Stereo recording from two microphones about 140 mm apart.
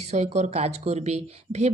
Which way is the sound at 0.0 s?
55° right (ahead or behind).